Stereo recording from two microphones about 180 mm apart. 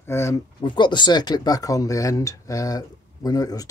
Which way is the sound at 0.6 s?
25° left (ahead or behind).